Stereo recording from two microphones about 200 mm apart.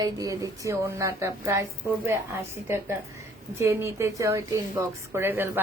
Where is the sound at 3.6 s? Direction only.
15° right (ahead or behind).